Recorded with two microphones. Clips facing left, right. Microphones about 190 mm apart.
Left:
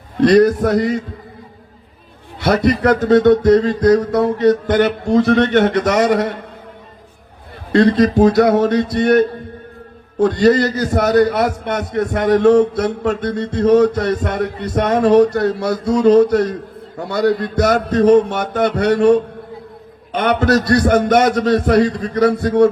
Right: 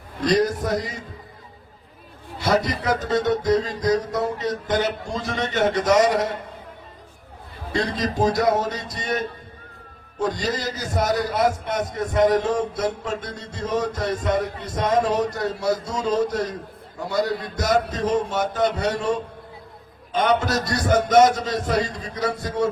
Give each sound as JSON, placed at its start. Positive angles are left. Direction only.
{"t": 0.2, "sound": "speech", "side_deg": 65}
{"t": 2.4, "sound": "speech", "side_deg": 65}
{"t": 7.7, "sound": "a man's voice", "side_deg": 65}